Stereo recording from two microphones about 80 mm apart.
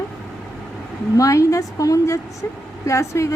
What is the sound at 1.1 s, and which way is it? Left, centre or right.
A woman's voice, left.